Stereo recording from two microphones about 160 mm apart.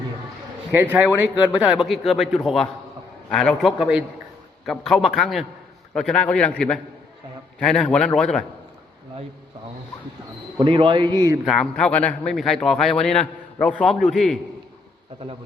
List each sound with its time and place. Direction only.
0.7 s a man's voice: 15° right (ahead or behind); by 8.4 s 5° left (ahead or behind)
10.6 s a man's voice: 35° right (ahead or behind)
11.4 s speech: centre (ahead or behind)